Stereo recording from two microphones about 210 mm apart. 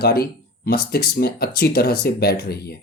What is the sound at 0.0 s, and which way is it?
Speech, 45° left (ahead or behind).